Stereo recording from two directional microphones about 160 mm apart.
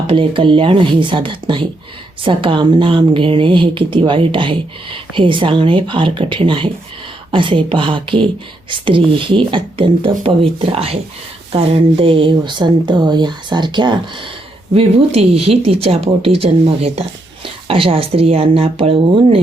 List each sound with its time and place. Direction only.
0.1 s speech: 35° right (ahead or behind)
14.7 s speech: 40° right (ahead or behind)